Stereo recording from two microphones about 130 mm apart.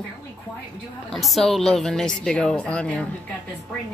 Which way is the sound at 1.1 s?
Centre (ahead or behind).